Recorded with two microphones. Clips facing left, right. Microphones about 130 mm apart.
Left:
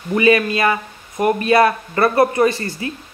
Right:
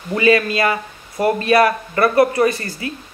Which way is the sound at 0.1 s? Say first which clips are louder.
Left 1 dB; 25° left (ahead or behind).